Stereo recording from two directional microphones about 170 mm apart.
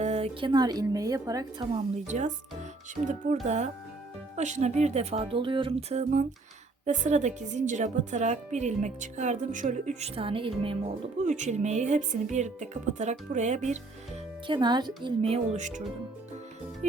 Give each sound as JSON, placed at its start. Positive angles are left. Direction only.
{"t": 0.0, "sound": "a woman's voice", "side_deg": -40}
{"t": 1.7, "sound": "speech", "side_deg": -45}
{"t": 14.4, "sound": "a woman's voice", "side_deg": -25}